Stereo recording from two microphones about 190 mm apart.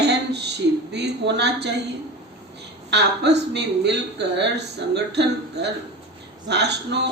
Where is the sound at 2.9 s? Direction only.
65° right (ahead or behind).